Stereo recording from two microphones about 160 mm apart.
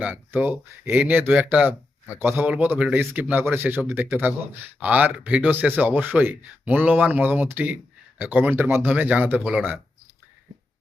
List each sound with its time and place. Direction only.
0.0 s speech: 10° right (ahead or behind)